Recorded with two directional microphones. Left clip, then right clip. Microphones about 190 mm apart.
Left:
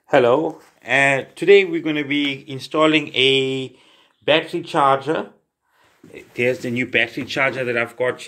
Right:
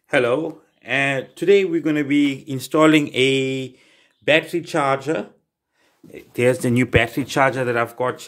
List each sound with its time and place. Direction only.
0.1 s speech: 5° right (ahead or behind)
0.8 s speech: 20° right (ahead or behind); by 3.1 s 45° right (ahead or behind)
3.3 s speech: 25° right (ahead or behind)
6.3 s speech: 45° right (ahead or behind)